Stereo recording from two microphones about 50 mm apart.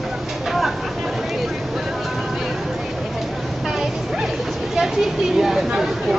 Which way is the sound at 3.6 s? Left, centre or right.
Centre.